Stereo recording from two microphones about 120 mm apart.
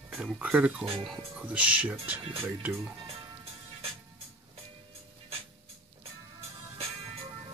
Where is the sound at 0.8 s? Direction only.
50° right (ahead or behind).